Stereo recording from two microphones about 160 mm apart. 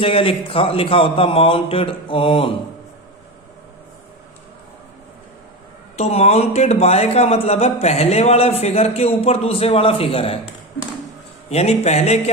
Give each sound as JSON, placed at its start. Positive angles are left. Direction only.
{"t": 0.0, "sound": "speech", "side_deg": 35}
{"t": 6.0, "sound": "speech", "side_deg": 40}
{"t": 11.4, "sound": "speech", "side_deg": 40}